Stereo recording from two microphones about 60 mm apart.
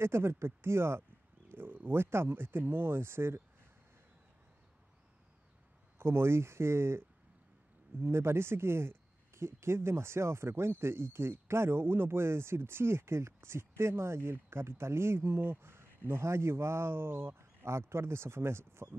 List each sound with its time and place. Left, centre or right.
0.0 s speech: right
5.9 s speech: right